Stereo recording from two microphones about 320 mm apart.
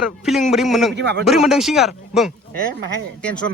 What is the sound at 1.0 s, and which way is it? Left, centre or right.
Speech, right.